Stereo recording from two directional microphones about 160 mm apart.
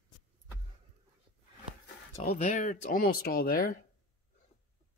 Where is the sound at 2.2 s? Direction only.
55° left (ahead or behind).